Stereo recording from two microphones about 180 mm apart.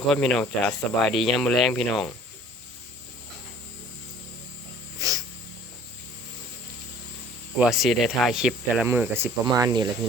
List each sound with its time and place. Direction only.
0.1 s speech: centre (ahead or behind)
4.9 s a sound: 20° right (ahead or behind)
7.6 s speech: centre (ahead or behind)
9.5 s speech: 25° right (ahead or behind)